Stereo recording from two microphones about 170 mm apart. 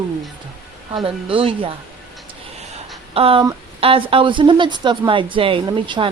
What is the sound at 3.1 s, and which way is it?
Speech, 35° right (ahead or behind).